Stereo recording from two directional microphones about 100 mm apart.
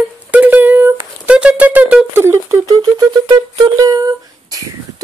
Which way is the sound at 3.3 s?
45° right (ahead or behind).